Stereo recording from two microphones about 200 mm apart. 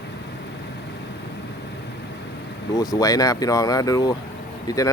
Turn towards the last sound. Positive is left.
turn(degrees=15)  # may be behind; listen again after turning